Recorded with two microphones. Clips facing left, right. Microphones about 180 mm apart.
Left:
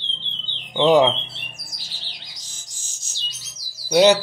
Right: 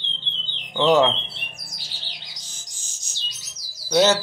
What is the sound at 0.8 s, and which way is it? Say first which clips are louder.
Speech: left 2 dB; 15° left (ahead or behind).